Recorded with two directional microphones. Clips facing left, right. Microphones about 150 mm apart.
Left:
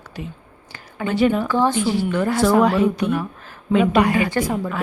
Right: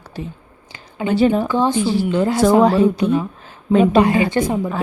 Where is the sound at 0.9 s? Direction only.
20° right (ahead or behind).